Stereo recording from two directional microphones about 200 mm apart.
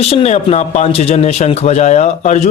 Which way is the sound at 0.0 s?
30° left (ahead or behind).